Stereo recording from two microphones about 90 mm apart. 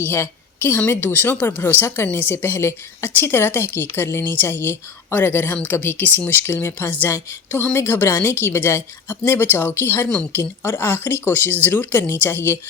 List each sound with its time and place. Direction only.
0.0 s a woman's voice: 25° left (ahead or behind)